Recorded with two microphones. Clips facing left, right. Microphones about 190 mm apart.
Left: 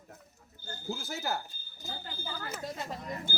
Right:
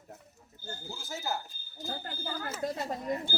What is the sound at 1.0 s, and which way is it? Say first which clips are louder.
Speech: left 1 dB; 65° left (ahead or behind).